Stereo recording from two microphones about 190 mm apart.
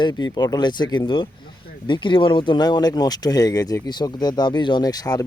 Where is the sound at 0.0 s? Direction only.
20° left (ahead or behind).